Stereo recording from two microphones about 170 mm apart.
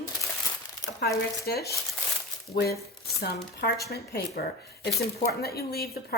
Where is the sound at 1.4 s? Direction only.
65° left (ahead or behind).